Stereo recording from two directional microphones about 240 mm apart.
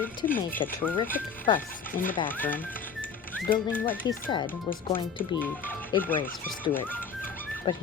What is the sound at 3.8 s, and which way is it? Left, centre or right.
Speech, centre.